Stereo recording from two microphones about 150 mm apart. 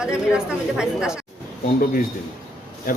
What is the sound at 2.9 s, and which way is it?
Speech, 70° left (ahead or behind).